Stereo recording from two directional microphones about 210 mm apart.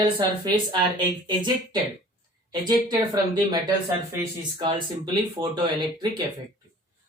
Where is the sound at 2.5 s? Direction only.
20° right (ahead or behind).